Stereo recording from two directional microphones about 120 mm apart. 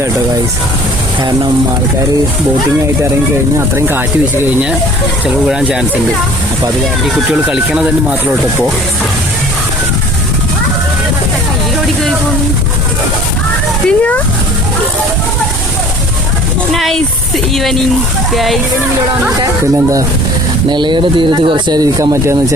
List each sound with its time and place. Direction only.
3.6 s speech: 20° right (ahead or behind)
5.5 s speech: 5° right (ahead or behind)
7.3 s speech: 5° right (ahead or behind)
13.8 s a sound: 10° left (ahead or behind)
16.7 s speech: centre (ahead or behind)
20.7 s speech: 40° right (ahead or behind); by 22.5 s 25° right (ahead or behind)